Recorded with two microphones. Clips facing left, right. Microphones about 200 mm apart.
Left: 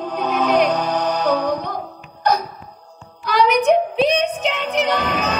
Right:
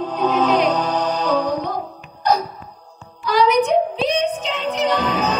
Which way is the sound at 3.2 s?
65° left (ahead or behind).